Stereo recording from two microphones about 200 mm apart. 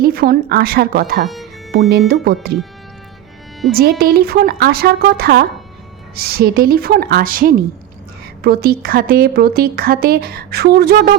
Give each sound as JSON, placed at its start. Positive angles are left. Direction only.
{"t": 0.0, "sound": "speech", "side_deg": -50}
{"t": 3.7, "sound": "speech", "side_deg": -50}